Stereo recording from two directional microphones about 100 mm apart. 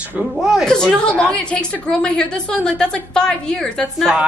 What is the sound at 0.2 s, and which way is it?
Speech, 5° right (ahead or behind).